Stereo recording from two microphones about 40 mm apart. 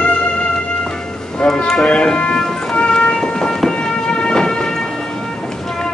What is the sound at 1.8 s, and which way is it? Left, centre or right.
Train, centre.